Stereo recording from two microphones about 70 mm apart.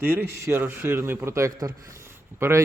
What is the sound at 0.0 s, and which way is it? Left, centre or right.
Speech, right.